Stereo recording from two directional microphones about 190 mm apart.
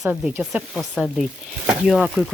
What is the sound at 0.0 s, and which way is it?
Speech, 10° right (ahead or behind).